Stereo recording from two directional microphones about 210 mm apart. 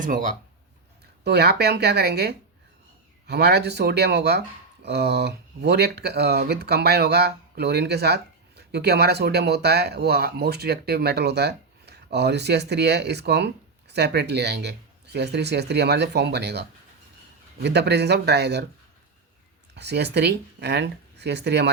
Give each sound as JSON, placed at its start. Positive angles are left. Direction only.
{"t": 0.0, "sound": "speech", "side_deg": -40}
{"t": 1.2, "sound": "speech", "side_deg": -50}
{"t": 19.7, "sound": "speech", "side_deg": -55}